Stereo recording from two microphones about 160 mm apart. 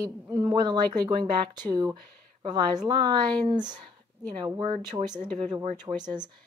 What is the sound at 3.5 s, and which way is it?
Speech, 25° right (ahead or behind).